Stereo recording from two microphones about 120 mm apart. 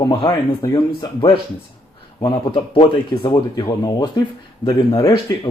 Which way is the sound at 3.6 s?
30° left (ahead or behind).